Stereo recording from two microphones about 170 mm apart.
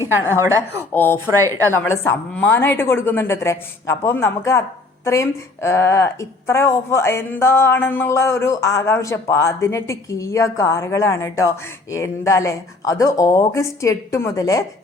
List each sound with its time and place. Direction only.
0.3 s a woman's voice: 15° right (ahead or behind)
0.8 s a woman's voice: 10° left (ahead or behind)
1.3 s a woman's voice: 20° right (ahead or behind)
1.7 s a woman's voice: 15° left (ahead or behind)